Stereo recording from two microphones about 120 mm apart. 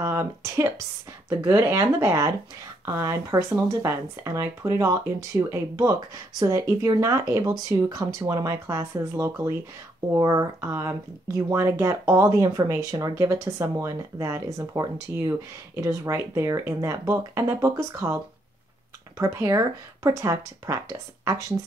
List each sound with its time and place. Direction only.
0.0 s speech: 25° right (ahead or behind)